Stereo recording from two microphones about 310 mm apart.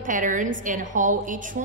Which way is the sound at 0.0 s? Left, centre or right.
Right.